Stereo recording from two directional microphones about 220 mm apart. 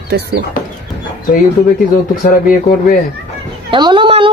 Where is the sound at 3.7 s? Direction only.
20° right (ahead or behind).